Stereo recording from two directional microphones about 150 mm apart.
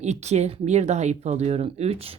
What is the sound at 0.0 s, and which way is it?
Speech, 50° right (ahead or behind).